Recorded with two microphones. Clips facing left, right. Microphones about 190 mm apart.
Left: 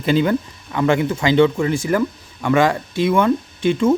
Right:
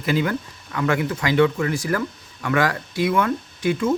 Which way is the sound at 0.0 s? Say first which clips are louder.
Left 5 dB; 25° left (ahead or behind).